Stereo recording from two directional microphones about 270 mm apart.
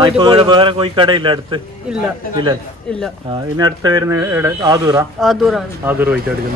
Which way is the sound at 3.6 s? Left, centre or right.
Centre.